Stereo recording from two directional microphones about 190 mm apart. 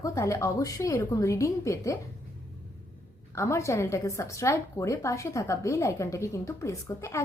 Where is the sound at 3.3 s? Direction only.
15° left (ahead or behind).